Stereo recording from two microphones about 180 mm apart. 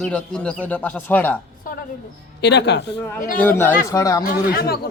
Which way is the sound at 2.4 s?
70° left (ahead or behind).